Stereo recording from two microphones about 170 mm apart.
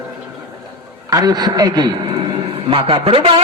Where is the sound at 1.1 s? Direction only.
25° right (ahead or behind).